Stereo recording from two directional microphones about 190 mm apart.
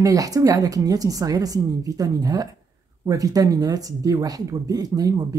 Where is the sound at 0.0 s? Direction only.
20° right (ahead or behind).